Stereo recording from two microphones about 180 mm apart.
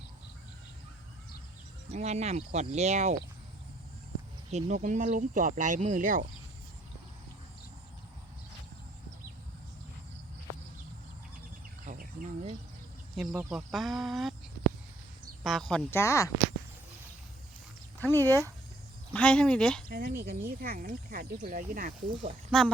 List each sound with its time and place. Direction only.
1.9 s speech: 35° right (ahead or behind)
4.5 s speech: 40° right (ahead or behind)
11.9 s insect: 45° right (ahead or behind)
13.1 s speech: 5° right (ahead or behind)
15.4 s speech: centre (ahead or behind)
18.2 s speech: 15° right (ahead or behind)
19.1 s speech: 5° left (ahead or behind)
19.9 s speech: 60° right (ahead or behind)
22.5 s speech: 5° left (ahead or behind)